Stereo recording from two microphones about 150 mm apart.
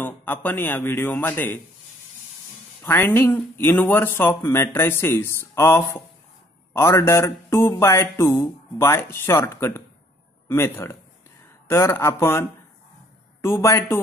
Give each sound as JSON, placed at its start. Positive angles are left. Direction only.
{"t": 0.0, "sound": "speech", "side_deg": 10}
{"t": 2.8, "sound": "speech", "side_deg": 15}